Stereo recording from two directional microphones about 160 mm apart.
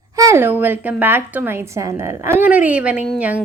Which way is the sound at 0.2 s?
15° right (ahead or behind).